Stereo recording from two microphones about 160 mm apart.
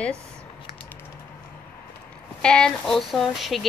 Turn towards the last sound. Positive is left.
turn(degrees=0)  # may be behind; listen again after turning